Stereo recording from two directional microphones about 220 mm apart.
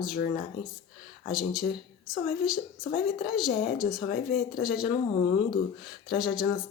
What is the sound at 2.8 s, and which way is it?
Speech, 40° left (ahead or behind).